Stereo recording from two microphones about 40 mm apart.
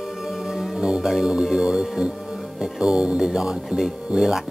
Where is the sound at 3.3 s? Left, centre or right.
Centre.